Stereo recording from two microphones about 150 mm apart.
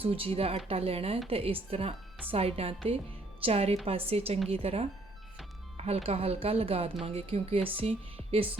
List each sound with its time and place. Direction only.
0.0 s speech: 40° right (ahead or behind)